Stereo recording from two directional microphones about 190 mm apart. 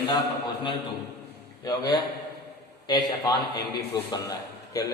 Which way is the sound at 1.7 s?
20° left (ahead or behind).